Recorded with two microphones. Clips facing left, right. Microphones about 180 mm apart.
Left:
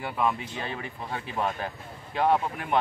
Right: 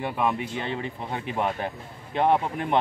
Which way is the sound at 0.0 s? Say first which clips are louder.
Right 2 dB; 20° right (ahead or behind).